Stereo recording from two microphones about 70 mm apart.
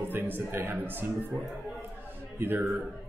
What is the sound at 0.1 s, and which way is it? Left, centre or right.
Speech, right.